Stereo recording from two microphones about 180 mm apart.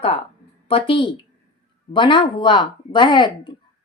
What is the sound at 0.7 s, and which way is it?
Speech, 30° left (ahead or behind).